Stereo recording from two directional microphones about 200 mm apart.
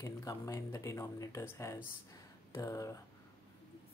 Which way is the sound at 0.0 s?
15° left (ahead or behind).